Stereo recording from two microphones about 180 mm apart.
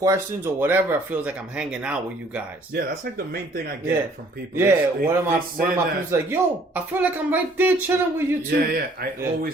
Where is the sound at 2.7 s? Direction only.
55° right (ahead or behind).